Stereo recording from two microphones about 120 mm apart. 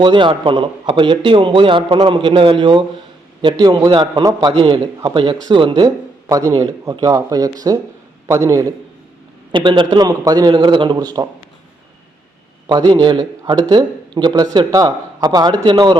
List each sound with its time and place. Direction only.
0.0 s a man's voice: 40° right (ahead or behind); by 8.6 s 25° right (ahead or behind)
9.5 s speech: 45° right (ahead or behind)
10.1 s a man's voice: 30° right (ahead or behind)
12.6 s a man's voice: 35° right (ahead or behind)